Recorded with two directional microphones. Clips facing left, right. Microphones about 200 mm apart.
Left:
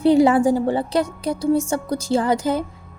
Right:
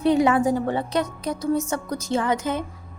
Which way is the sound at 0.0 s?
30° left (ahead or behind).